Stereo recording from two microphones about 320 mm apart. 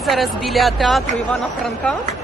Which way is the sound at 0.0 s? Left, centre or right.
Centre.